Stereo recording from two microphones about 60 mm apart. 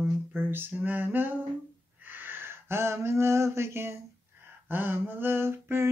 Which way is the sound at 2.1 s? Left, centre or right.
Right.